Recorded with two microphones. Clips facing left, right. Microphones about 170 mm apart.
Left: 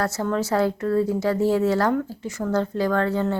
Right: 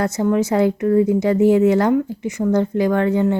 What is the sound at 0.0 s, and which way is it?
Speech, 15° right (ahead or behind).